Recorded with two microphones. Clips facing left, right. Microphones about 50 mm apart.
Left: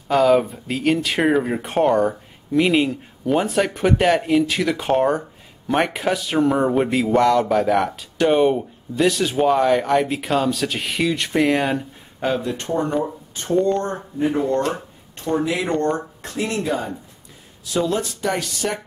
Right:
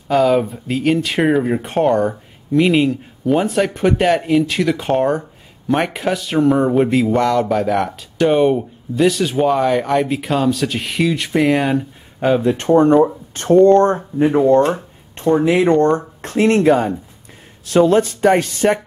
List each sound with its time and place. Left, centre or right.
0.1 s speech: centre
12.6 s speech: right
13.0 s speech: right
14.5 s speech: right